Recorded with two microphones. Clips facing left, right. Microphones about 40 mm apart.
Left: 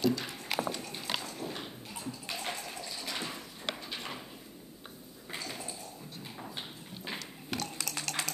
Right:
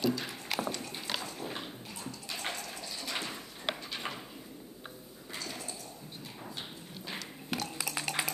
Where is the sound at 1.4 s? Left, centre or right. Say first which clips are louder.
Even; centre.